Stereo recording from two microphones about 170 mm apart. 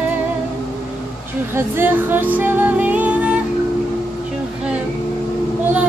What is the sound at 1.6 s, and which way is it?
Music, 10° right (ahead or behind).